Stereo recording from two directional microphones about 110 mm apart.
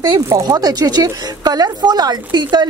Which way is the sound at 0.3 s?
35° right (ahead or behind).